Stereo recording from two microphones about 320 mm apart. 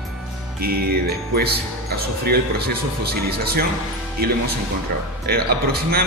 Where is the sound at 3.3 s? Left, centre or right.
Right.